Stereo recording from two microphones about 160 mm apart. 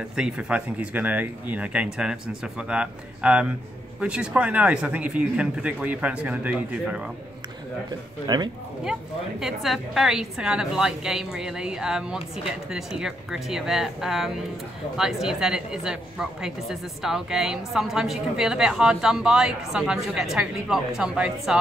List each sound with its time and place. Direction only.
0.1 s speech: 5° right (ahead or behind)
8.3 s speech: 25° right (ahead or behind)
9.4 s speech: centre (ahead or behind)